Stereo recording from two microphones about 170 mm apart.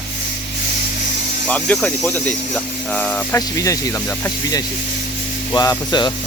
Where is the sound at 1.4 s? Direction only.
5° left (ahead or behind); by 6.1 s 25° left (ahead or behind).